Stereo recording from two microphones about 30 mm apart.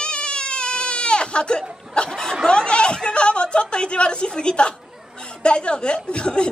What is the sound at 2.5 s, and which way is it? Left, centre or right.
A woman's voice, left.